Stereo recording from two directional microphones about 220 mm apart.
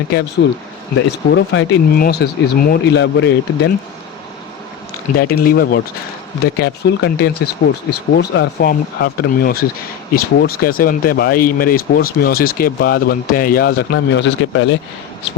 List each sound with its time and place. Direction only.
0.4 s speech: 55° left (ahead or behind)
5.1 s speech: 45° left (ahead or behind)